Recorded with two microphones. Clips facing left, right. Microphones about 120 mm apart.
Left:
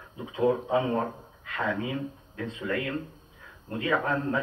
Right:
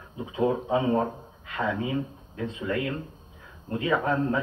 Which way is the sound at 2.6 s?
15° right (ahead or behind).